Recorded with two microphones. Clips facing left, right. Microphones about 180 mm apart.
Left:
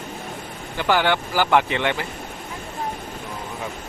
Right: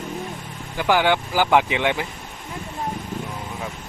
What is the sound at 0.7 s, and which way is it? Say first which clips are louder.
Speech: right 1 dB; 10° right (ahead or behind).